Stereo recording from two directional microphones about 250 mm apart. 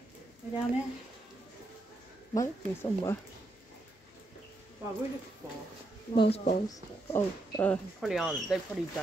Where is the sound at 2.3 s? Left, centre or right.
Centre.